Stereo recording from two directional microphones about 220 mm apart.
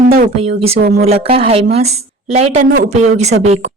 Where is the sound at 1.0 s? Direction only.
25° right (ahead or behind).